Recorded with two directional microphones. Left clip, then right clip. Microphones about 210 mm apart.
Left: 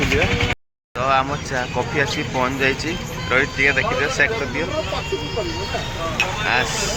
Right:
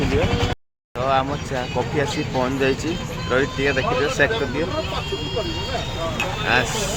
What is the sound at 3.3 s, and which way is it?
Speech, 25° right (ahead or behind).